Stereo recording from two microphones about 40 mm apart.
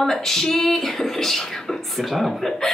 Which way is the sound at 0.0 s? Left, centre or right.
Centre.